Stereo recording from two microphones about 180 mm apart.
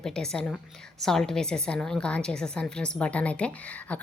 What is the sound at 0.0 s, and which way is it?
A woman's voice, 5° left (ahead or behind).